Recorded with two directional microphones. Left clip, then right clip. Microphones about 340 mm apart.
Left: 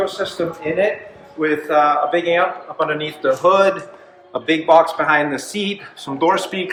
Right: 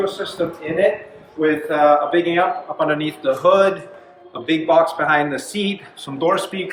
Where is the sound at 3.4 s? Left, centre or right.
Centre.